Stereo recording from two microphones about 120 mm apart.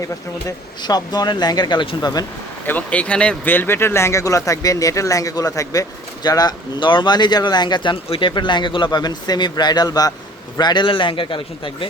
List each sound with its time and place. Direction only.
0.8 s speech: 35° left (ahead or behind)
2.6 s a man's voice: 10° left (ahead or behind); by 11.9 s 45° left (ahead or behind)